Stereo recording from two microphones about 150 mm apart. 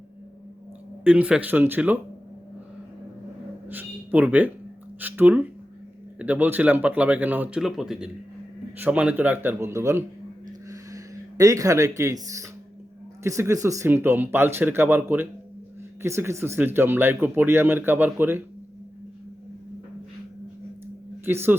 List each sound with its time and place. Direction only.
1.0 s speech: 10° right (ahead or behind)
3.7 s a sound: 10° right (ahead or behind)
4.9 s speech: 10° right (ahead or behind)
21.2 s speech: 15° right (ahead or behind)